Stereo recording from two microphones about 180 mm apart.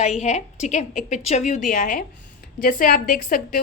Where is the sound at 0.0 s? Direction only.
40° left (ahead or behind).